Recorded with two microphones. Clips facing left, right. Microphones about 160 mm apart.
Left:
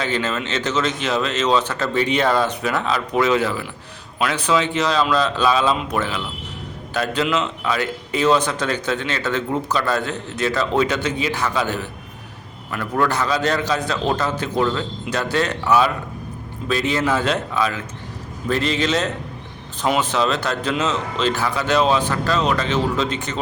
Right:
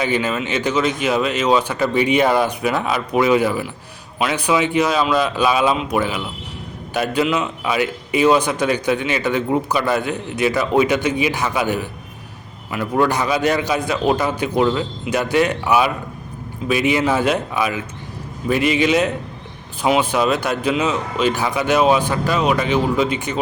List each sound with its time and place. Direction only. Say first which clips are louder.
0.0 s a man's voice: right 3 dB; 10° right (ahead or behind)